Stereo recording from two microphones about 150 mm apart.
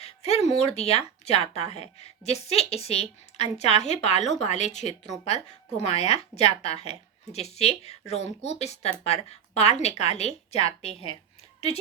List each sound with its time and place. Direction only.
0.0 s speech: 45° left (ahead or behind)